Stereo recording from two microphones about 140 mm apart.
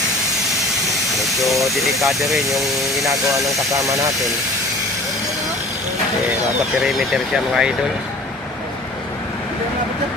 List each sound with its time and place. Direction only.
1.2 s speech: centre (ahead or behind)
3.1 s speech: 25° right (ahead or behind)
6.8 s speech: centre (ahead or behind)